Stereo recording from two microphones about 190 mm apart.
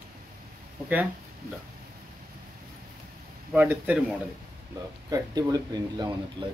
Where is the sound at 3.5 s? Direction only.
10° right (ahead or behind).